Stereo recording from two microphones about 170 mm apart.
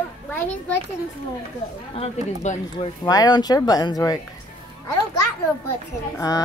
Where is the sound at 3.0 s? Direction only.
20° left (ahead or behind).